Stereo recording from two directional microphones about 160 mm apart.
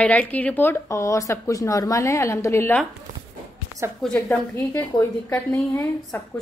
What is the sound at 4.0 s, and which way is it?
A woman's voice, 5° left (ahead or behind).